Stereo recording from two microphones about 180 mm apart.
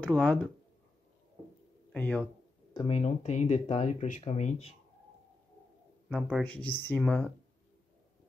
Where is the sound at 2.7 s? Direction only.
25° left (ahead or behind).